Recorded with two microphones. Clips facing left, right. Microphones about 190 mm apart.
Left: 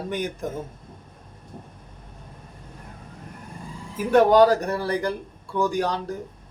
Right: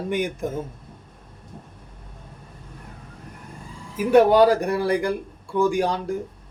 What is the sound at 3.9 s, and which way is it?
Speech, 10° right (ahead or behind).